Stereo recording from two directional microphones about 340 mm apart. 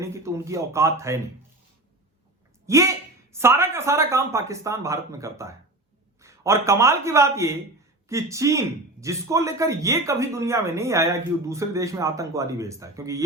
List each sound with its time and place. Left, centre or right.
0.0 s speech: centre
2.6 s speech: centre